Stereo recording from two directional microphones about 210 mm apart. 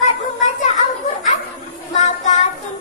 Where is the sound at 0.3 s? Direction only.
35° left (ahead or behind).